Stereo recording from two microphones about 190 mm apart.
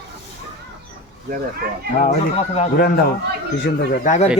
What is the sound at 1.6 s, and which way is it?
Speech, 55° right (ahead or behind).